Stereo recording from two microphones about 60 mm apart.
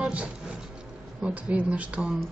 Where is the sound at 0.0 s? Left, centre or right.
Right.